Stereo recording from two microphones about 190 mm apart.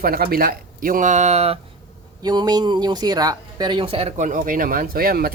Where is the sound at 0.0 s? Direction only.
50° right (ahead or behind); by 1.5 s 35° right (ahead or behind).